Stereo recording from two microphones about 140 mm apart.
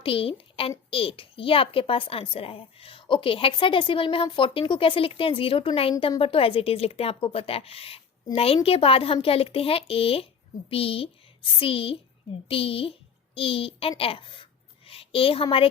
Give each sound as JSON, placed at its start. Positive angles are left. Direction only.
{"t": 0.0, "sound": "a woman's voice", "side_deg": 40}